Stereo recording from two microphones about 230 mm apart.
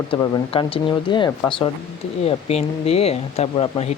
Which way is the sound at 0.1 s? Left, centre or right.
Left.